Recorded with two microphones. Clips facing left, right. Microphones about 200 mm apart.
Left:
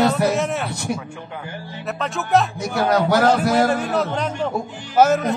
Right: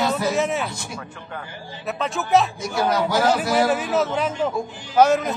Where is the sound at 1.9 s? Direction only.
Centre (ahead or behind).